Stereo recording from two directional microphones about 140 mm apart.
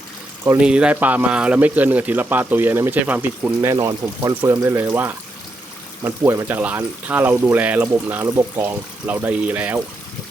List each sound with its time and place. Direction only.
0.4 s speech: 10° right (ahead or behind)